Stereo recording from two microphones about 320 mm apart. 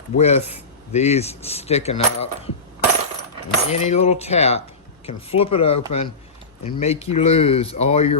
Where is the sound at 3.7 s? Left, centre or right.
Left.